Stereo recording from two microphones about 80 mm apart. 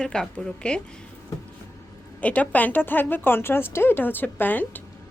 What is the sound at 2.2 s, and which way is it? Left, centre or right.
A woman's voice, centre.